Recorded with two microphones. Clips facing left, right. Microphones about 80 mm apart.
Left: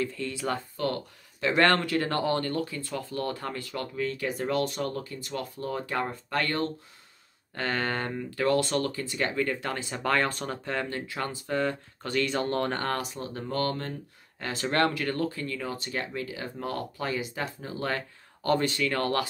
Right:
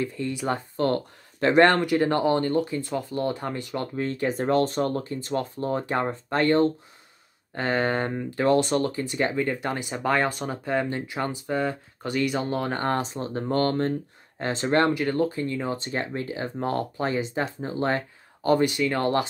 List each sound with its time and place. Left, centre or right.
0.0 s speech: right
0.7 s a sound: right
1.5 s speech: centre
12.8 s speech: right